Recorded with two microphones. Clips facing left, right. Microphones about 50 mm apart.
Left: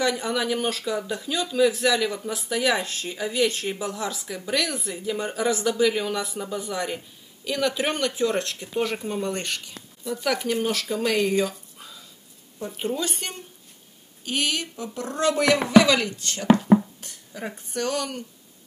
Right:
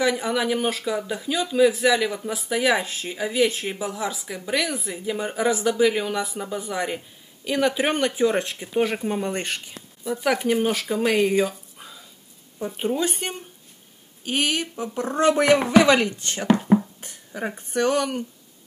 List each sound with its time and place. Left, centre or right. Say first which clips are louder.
0.0 s speech: right 2 dB; centre; by 16.4 s right
16.6 s a sound: left 1 dB; centre
17.0 s speech: right 4 dB; right